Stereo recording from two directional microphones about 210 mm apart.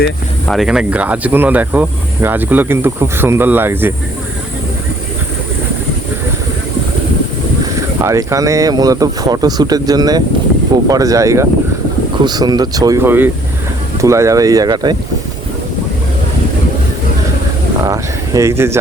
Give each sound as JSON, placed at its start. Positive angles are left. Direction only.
{"t": 0.4, "sound": "speech", "side_deg": 0}
{"t": 7.8, "sound": "speech", "side_deg": -15}
{"t": 17.8, "sound": "speech", "side_deg": -15}